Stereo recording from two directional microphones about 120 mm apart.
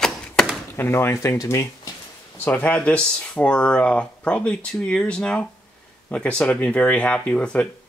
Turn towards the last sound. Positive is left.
turn(degrees=10)  # may be behind; listen again after turning